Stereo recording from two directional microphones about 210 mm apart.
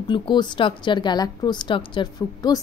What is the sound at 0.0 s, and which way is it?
A woman's voice, 20° left (ahead or behind).